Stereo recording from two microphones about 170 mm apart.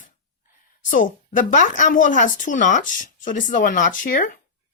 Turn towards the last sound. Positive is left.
turn(degrees=50)  # may be behind; listen again after turning